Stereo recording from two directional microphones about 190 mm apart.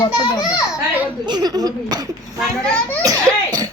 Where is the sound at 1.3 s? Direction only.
20° right (ahead or behind).